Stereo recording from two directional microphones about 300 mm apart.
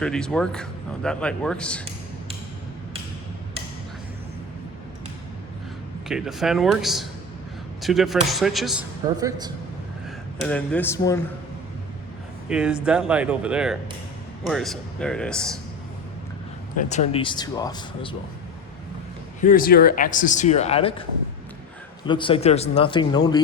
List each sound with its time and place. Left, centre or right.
0.0 s speech: centre
6.1 s speech: centre
10.4 s speech: centre
12.5 s speech: centre
16.7 s speech: left
19.4 s speech: left
22.0 s speech: centre